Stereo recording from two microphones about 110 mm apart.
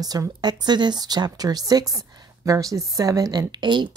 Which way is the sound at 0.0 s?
35° right (ahead or behind).